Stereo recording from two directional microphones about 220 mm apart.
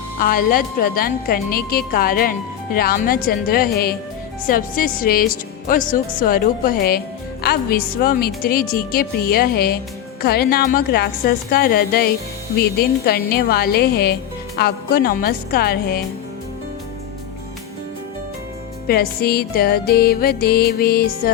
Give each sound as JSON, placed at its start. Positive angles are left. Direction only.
{"t": 0.2, "sound": "a woman's voice", "side_deg": 40}
{"t": 18.9, "sound": "a woman's voice", "side_deg": 45}